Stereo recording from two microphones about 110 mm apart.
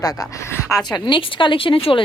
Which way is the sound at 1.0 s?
45° left (ahead or behind).